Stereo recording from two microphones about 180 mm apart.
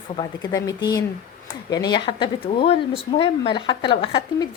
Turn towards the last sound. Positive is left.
turn(degrees=25)  # may be behind; listen again after turning